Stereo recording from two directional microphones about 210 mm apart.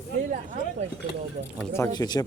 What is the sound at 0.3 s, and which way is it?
Speech, 35° right (ahead or behind).